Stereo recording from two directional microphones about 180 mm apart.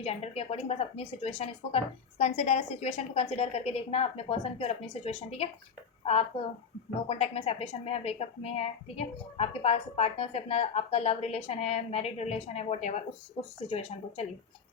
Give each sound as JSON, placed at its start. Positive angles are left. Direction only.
{"t": 0.0, "sound": "a woman's voice", "side_deg": 35}